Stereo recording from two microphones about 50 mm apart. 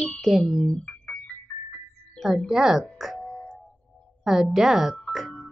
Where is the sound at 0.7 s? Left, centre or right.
Left.